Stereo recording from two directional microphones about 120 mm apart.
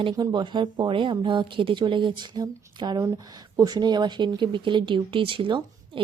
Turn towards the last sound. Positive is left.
turn(degrees=-45)  # may be behind; listen again after turning